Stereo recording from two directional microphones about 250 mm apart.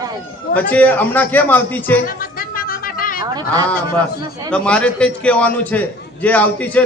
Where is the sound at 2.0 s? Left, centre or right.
Left.